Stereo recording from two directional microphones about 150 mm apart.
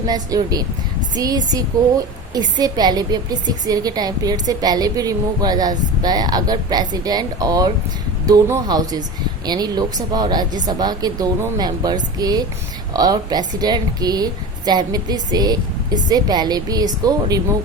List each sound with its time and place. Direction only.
0.1 s a woman's voice: 25° right (ahead or behind)